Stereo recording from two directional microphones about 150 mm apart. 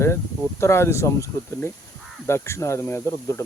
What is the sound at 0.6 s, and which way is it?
Speech, 20° left (ahead or behind).